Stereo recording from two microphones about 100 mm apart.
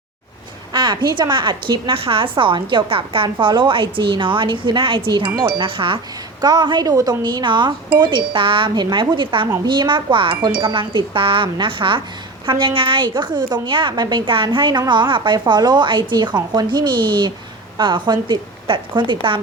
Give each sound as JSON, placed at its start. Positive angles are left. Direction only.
{"t": 0.7, "sound": "a woman's voice", "side_deg": -50}
{"t": 3.2, "sound": "a woman's voice", "side_deg": -45}
{"t": 6.4, "sound": "a woman's voice", "side_deg": -45}